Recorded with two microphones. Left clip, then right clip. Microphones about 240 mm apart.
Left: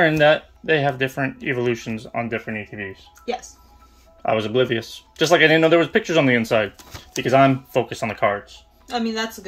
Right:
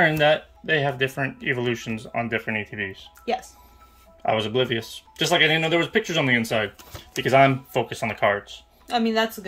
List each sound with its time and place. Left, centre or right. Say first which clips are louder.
0.0 s speech: left 3 dB; centre
4.2 s speech: left 3 dB; centre
8.9 s speech: right 2 dB; right